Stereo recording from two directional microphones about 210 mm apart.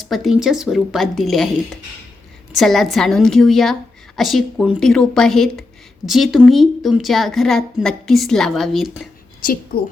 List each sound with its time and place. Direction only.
0.1 s a woman's voice: centre (ahead or behind)
2.6 s a woman's voice: centre (ahead or behind)